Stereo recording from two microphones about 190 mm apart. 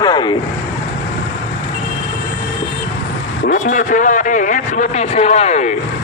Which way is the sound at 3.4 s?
45° left (ahead or behind).